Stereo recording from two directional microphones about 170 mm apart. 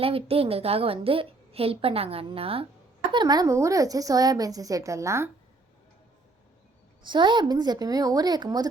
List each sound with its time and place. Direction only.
0.0 s a woman's voice: 35° right (ahead or behind); by 5.3 s 15° right (ahead or behind)
7.0 s a woman's voice: 25° right (ahead or behind)